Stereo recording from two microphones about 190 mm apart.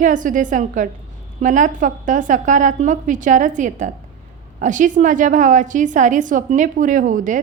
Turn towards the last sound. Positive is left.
turn(degrees=-45)  # may be behind; listen again after turning